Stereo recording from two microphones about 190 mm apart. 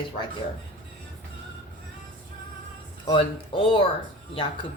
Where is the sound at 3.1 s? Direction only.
25° left (ahead or behind).